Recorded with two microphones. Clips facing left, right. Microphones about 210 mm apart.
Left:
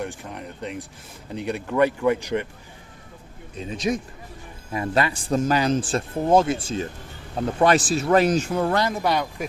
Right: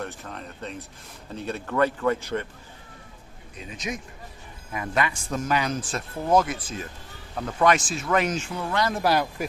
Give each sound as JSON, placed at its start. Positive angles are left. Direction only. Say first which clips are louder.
{"t": 0.0, "sound": "speech", "louder": "left 3 dB", "side_deg": 15}
{"t": 3.6, "sound": "a man's voice", "louder": "left 8 dB", "side_deg": 30}
{"t": 8.9, "sound": "speech", "louder": "even", "side_deg": 0}